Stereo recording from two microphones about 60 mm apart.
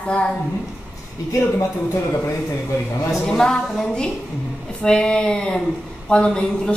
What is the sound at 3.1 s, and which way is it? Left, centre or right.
A woman's voice, centre.